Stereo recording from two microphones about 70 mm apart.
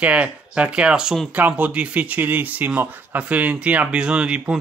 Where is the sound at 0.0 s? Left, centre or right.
Centre.